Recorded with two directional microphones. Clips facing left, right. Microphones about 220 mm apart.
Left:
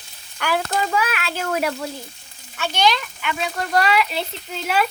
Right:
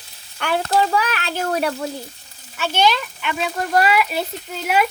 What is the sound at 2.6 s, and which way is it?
Speech, 5° right (ahead or behind).